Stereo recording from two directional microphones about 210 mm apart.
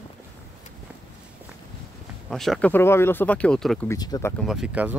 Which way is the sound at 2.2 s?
Centre (ahead or behind).